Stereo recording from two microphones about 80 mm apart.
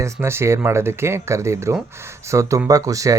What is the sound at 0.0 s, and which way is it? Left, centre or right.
Speech, right.